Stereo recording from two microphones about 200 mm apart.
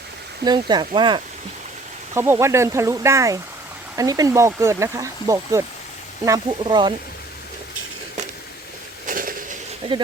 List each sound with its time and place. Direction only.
0.4 s speech: 20° right (ahead or behind)
2.1 s speech: 10° right (ahead or behind)
9.0 s a sound: 40° right (ahead or behind)
9.8 s speech: 25° right (ahead or behind)